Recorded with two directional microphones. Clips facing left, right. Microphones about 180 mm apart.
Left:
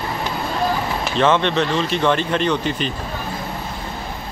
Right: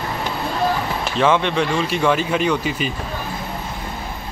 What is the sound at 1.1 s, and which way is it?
A man's voice, 10° right (ahead or behind).